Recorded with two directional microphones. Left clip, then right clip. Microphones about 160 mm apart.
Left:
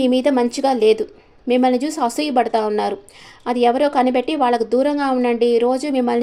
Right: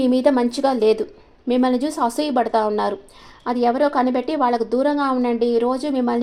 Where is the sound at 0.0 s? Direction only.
5° left (ahead or behind).